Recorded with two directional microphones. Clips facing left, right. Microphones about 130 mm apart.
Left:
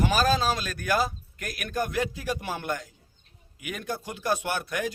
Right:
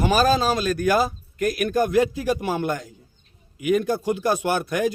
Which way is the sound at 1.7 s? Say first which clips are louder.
Right 7 dB; 40° right (ahead or behind).